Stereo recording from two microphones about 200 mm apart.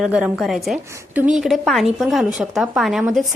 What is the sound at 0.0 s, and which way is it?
Speech, 5° right (ahead or behind).